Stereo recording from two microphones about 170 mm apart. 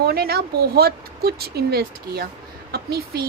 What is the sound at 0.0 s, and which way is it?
A woman's voice, 65° right (ahead or behind).